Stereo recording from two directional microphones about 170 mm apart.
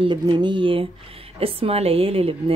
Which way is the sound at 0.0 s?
25° right (ahead or behind).